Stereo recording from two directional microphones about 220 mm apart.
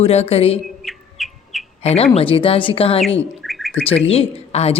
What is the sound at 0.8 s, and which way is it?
Bird, centre (ahead or behind).